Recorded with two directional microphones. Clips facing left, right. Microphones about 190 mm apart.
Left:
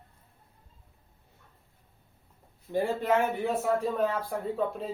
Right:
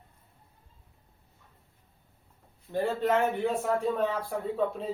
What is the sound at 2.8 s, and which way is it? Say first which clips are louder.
Speech: right 1 dB; 10° left (ahead or behind).